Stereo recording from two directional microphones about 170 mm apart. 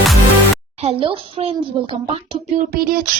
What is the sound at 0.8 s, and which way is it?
A woman's voice, 35° right (ahead or behind).